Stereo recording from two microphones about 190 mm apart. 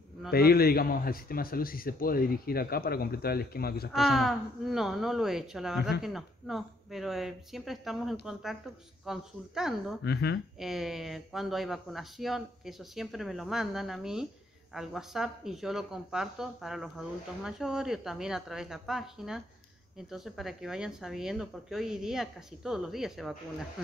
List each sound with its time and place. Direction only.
0.3 s a man's voice: 55° left (ahead or behind)
3.9 s speech: centre (ahead or behind)
10.0 s speech: 60° left (ahead or behind)
10.6 s speech: centre (ahead or behind)